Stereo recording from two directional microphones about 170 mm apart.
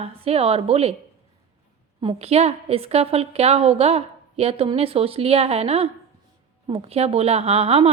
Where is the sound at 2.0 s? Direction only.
35° right (ahead or behind).